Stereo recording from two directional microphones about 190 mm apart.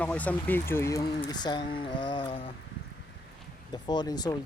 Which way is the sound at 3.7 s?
20° left (ahead or behind).